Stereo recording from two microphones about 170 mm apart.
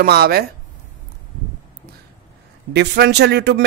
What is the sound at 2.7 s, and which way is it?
Speech, 80° right.